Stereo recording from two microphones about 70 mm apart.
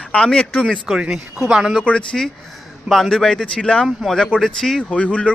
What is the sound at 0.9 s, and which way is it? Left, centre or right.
Speech, centre.